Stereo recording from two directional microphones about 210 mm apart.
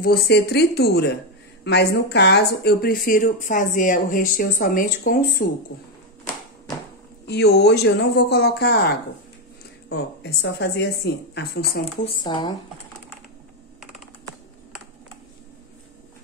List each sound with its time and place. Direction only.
0.0 s speech: 45° left (ahead or behind)
7.2 s speech: 50° left (ahead or behind)
12.0 s speech: 25° left (ahead or behind)